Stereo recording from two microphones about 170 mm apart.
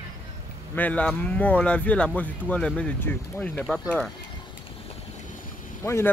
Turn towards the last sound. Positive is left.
turn(degrees=15)  # may be behind; listen again after turning